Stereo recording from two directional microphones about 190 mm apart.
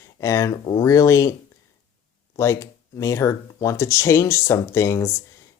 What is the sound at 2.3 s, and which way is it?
Speech, 15° left (ahead or behind).